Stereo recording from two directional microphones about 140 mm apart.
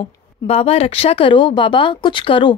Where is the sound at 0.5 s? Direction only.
45° left (ahead or behind).